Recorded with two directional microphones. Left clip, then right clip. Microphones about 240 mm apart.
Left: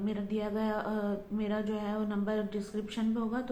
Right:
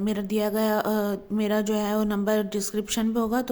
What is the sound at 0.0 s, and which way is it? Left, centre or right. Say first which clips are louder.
Speech: right 9 dB; right.